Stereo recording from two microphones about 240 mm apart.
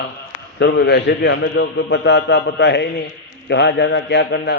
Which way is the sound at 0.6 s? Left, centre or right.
Left.